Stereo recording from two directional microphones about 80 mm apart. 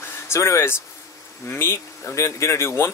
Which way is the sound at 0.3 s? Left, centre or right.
Left.